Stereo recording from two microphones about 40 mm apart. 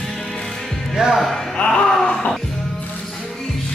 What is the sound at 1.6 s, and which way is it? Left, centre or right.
Music, left.